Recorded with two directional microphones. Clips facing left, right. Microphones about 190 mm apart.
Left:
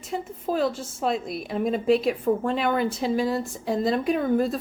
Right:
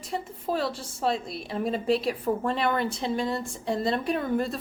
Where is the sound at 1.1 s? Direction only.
30° right (ahead or behind).